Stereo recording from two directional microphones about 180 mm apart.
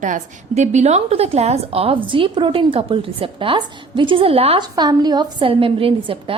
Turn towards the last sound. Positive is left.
turn(degrees=-30)  # may be behind; listen again after turning